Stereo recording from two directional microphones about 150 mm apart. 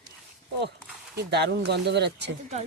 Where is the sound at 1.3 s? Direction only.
90° right.